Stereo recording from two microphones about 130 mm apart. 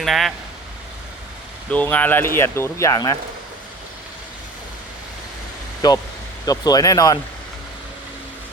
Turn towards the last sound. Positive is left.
turn(degrees=30)  # may be behind; listen again after turning